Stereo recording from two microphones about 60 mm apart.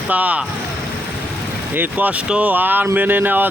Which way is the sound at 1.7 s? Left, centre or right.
Right.